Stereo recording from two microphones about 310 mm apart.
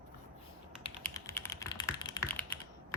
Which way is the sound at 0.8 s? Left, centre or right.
Centre.